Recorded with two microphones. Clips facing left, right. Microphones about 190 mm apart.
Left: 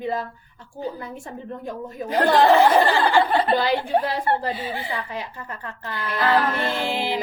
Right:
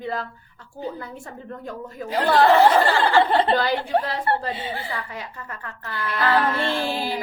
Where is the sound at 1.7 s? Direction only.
20° left (ahead or behind).